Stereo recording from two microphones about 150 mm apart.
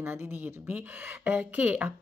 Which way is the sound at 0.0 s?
15° right (ahead or behind).